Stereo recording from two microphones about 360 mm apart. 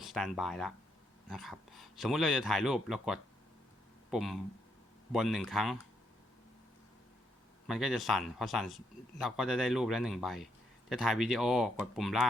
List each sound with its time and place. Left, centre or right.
0.0 s speech: centre
7.7 s speech: centre